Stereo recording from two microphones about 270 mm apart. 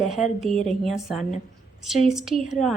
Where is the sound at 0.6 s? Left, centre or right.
Centre.